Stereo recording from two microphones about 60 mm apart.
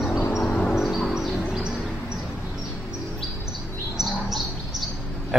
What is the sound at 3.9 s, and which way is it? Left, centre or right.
Bird, centre.